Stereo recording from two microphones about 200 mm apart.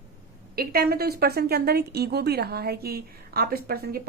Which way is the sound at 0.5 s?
50° right (ahead or behind).